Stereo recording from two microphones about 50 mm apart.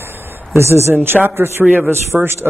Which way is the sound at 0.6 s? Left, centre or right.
Right.